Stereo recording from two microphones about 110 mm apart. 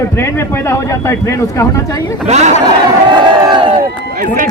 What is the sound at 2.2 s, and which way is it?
Speech, 90° right.